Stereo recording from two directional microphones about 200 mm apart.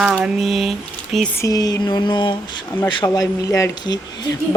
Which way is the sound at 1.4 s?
20° left (ahead or behind).